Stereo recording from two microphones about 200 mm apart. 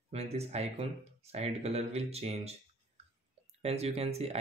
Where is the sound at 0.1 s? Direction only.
30° right (ahead or behind).